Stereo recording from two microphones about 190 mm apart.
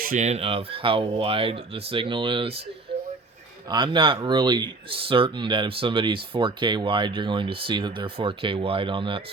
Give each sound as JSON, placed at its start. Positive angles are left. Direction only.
{"t": 0.0, "sound": "speech", "side_deg": -40}
{"t": 3.7, "sound": "speech", "side_deg": -25}